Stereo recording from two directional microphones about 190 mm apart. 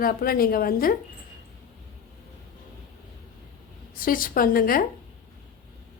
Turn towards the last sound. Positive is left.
turn(degrees=50)  # may be behind; listen again after turning